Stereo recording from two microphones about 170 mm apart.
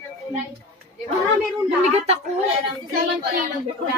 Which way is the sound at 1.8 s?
40° right (ahead or behind).